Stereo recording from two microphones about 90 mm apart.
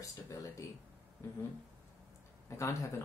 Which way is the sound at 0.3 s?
40° left (ahead or behind).